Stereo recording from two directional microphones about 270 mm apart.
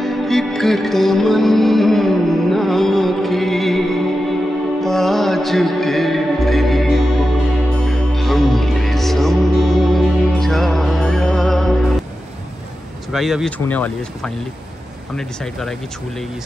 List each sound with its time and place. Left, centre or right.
0.0 s music: centre
13.1 s speech: centre